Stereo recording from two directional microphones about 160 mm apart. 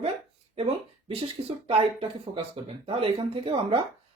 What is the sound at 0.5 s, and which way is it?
Speech, 40° right (ahead or behind).